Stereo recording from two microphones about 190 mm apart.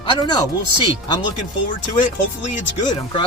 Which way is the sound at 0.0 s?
25° left (ahead or behind).